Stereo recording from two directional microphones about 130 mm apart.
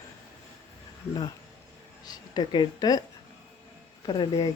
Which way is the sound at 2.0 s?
35° left (ahead or behind).